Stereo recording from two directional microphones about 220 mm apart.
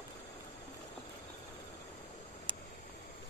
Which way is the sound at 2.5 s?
20° right (ahead or behind).